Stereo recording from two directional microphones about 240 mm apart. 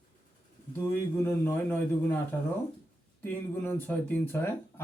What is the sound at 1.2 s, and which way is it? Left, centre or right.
Speech, centre.